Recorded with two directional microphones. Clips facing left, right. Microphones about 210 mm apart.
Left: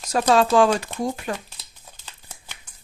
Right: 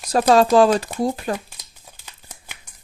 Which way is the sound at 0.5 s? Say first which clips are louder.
Right 3 dB; 35° right (ahead or behind).